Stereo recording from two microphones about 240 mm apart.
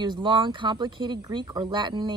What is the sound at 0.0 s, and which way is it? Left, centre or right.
A woman's voice, centre.